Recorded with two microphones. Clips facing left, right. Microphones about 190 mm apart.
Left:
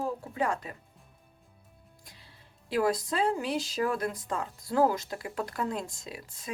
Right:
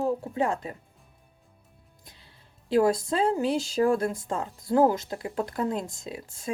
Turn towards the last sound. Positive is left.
turn(degrees=-25)  # may be behind; listen again after turning